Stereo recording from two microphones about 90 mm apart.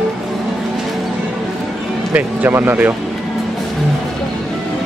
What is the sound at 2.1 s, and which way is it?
Speech, 20° right (ahead or behind).